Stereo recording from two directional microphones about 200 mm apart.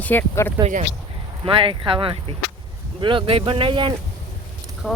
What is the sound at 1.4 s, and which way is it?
Speech, 25° right (ahead or behind).